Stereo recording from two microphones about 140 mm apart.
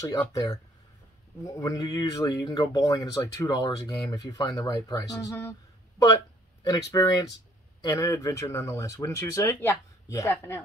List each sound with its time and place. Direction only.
0.3 s speech: 25° left (ahead or behind)
6.6 s speech: 25° left (ahead or behind)